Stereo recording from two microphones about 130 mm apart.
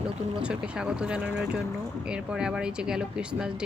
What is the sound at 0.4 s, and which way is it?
Speech, 5° right (ahead or behind).